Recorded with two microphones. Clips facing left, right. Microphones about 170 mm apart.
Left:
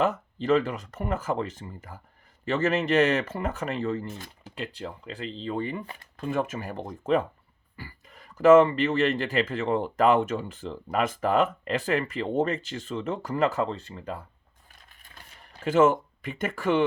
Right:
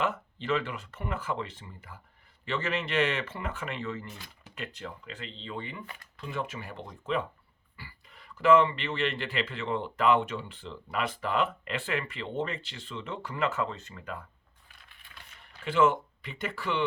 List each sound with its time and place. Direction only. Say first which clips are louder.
0.0 s speech: left 6 dB; 40° left (ahead or behind)
14.7 s zipper: left 2 dB; 45° left (ahead or behind)